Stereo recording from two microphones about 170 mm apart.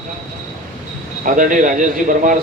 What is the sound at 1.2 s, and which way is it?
Speech, 50° right (ahead or behind).